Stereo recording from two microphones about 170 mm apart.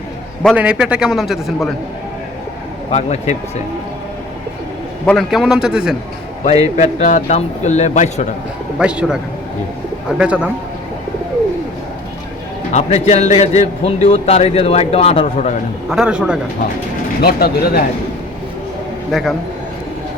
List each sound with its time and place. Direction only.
0.5 s a man's voice: 5° right (ahead or behind)
2.9 s a man's voice: 40° left (ahead or behind)
5.0 s a man's voice: centre (ahead or behind)
6.7 s speech: 45° left (ahead or behind)
8.8 s a man's voice: 5° right (ahead or behind)
12.7 s a man's voice: 40° left (ahead or behind)
15.9 s a man's voice: 5° right (ahead or behind)
17.2 s speech: 65° left (ahead or behind)
19.1 s a man's voice: centre (ahead or behind)